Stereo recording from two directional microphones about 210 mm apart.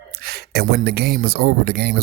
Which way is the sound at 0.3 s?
50° right (ahead or behind).